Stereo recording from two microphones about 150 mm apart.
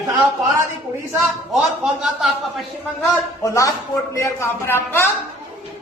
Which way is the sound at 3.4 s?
20° left (ahead or behind).